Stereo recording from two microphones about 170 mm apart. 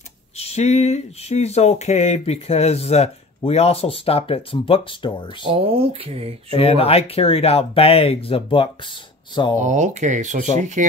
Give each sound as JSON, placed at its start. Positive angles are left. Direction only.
{"t": 0.4, "sound": "speech", "side_deg": 40}
{"t": 5.5, "sound": "speech", "side_deg": -35}
{"t": 6.5, "sound": "speech", "side_deg": 35}
{"t": 9.6, "sound": "speech", "side_deg": -45}